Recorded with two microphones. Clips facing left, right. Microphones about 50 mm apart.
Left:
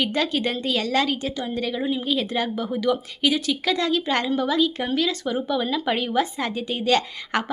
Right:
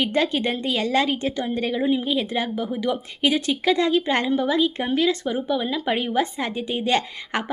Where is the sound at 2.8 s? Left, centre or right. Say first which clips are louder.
Left 3 dB; right.